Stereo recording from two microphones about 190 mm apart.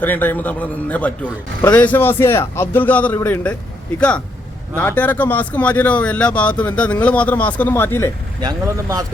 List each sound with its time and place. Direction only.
0.0 s a man's voice: 10° left (ahead or behind)
4.8 s a man's voice: 10° left (ahead or behind)
8.4 s speech: 20° right (ahead or behind)